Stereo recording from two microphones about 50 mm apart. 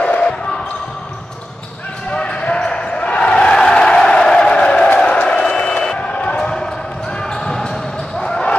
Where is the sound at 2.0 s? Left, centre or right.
Left.